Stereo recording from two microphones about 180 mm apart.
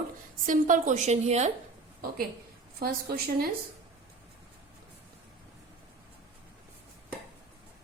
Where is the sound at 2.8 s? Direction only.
55° right (ahead or behind).